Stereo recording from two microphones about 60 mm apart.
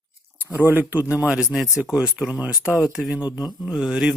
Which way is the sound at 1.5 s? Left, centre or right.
Centre.